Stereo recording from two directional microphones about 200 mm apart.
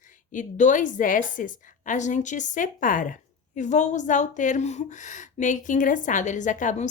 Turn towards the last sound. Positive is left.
turn(degrees=40)  # may be behind; listen again after turning